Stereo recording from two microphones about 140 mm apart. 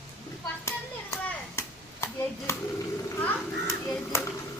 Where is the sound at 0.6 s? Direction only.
20° left (ahead or behind).